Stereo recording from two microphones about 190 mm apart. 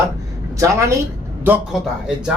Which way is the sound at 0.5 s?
15° right (ahead or behind).